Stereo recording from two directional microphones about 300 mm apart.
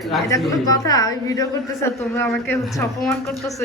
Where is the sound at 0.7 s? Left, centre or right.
Centre.